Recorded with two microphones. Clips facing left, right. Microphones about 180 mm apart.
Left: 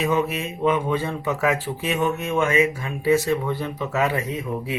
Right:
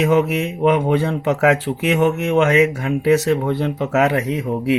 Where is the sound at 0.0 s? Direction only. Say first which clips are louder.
Right 6 dB; 75° right (ahead or behind).